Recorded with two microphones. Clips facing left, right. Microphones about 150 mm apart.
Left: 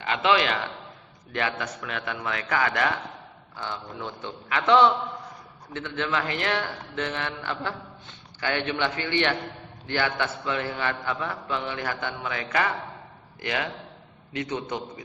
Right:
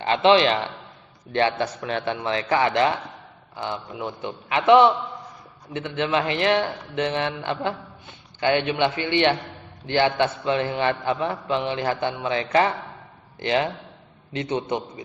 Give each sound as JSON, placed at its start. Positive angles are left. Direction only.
{"t": 0.0, "sound": "a man's voice", "side_deg": -30}